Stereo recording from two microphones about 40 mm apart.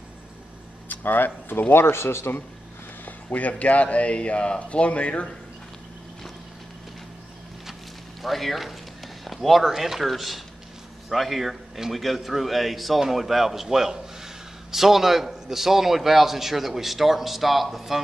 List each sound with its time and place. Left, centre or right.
0.8 s a sound: left
1.7 s speech: left
3.1 s speech: left
8.2 s a man's voice: centre